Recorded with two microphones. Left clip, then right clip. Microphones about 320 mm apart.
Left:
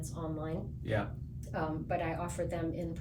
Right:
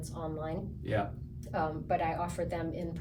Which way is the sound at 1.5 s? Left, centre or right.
Centre.